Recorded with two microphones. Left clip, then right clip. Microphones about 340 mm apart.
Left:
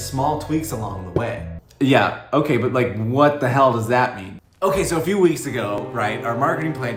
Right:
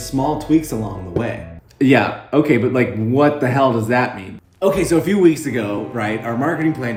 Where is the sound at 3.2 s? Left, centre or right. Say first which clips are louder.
Even; left.